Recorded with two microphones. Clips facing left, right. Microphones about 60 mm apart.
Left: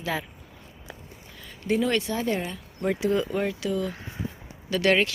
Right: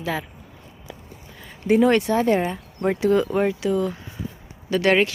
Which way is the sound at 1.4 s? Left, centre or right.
Right.